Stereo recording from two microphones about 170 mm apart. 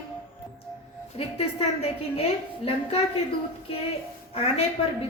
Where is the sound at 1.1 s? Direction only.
35° left (ahead or behind).